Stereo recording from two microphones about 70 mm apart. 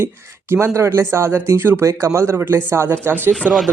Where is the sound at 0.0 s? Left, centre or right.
Right.